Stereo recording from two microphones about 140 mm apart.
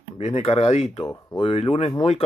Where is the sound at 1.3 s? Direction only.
40° left (ahead or behind).